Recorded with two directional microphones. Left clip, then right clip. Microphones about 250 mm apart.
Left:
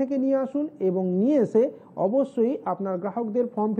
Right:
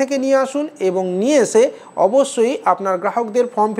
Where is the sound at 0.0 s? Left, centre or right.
Centre.